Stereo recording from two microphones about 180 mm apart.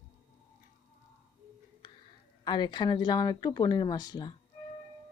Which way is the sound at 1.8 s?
25° left (ahead or behind).